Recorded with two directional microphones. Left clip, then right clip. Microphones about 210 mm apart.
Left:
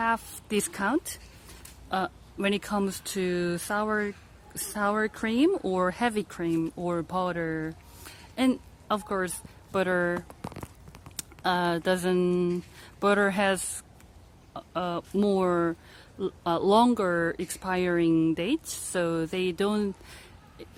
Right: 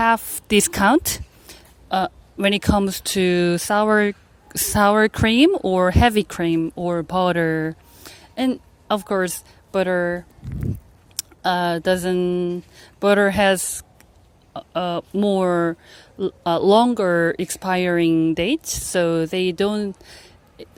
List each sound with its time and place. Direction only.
0.0 s a woman's voice: 35° right (ahead or behind)
1.9 s speech: 30° right (ahead or behind)
5.5 s speech: 25° right (ahead or behind)
11.2 s speech: 25° right (ahead or behind)